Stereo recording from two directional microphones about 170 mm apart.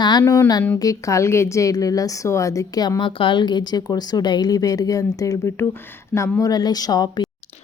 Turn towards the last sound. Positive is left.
turn(degrees=25)  # may be behind; listen again after turning